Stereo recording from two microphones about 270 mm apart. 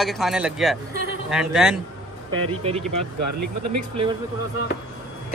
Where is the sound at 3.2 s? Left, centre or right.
Right.